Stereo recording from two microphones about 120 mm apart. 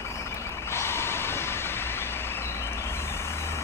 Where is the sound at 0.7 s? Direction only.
20° left (ahead or behind).